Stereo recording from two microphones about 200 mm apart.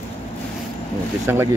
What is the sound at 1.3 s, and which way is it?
Speech, 10° right (ahead or behind).